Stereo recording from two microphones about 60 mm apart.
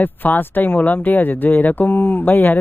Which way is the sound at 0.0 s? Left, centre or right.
Left.